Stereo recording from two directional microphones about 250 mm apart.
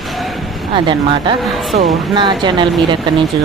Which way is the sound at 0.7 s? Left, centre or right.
Centre.